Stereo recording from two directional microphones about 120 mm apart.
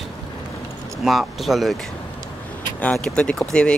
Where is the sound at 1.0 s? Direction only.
Centre (ahead or behind).